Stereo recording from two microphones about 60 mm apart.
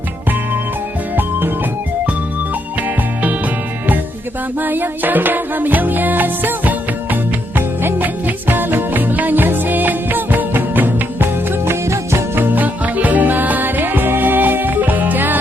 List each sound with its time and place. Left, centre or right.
4.6 s music: right